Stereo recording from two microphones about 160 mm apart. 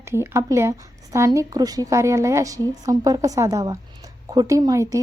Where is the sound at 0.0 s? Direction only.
15° right (ahead or behind).